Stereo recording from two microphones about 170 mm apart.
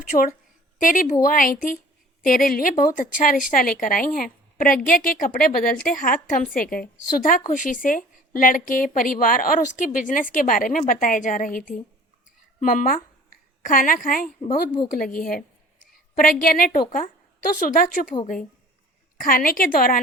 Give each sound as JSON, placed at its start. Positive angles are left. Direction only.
{"t": 0.0, "sound": "a woman's voice", "side_deg": 55}